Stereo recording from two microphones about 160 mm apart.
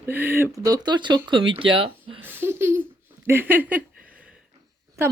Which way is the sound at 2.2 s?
15° right (ahead or behind).